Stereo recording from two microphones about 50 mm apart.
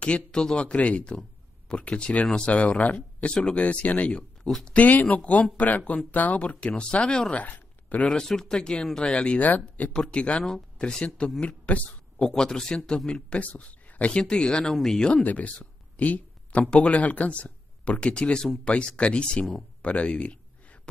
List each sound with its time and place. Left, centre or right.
0.0 s speech: centre
3.3 s speech: left
4.7 s speech: left
7.3 s a sound: left
8.1 s speech: centre
12.2 s speech: centre
13.4 s speech: left
14.1 s speech: centre
15.2 s speech: left
15.6 s a sound: left
16.7 s speech: left
19.8 s a sound: left